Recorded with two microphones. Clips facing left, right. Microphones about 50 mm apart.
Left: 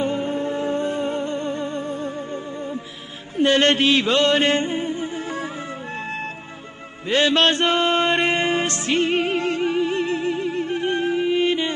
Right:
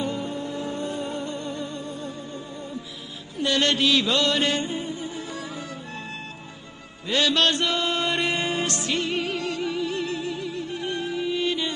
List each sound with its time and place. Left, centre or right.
0.0 s music: left